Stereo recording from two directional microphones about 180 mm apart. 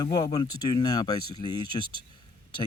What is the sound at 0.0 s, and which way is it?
Speech, 20° left (ahead or behind).